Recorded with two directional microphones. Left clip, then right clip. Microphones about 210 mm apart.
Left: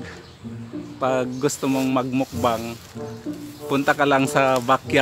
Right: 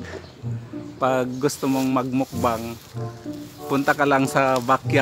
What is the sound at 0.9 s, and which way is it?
Speech, 20° right (ahead or behind).